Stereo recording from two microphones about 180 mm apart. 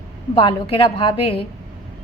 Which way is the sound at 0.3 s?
30° left (ahead or behind).